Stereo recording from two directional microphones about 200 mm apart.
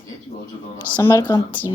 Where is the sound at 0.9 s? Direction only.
15° left (ahead or behind).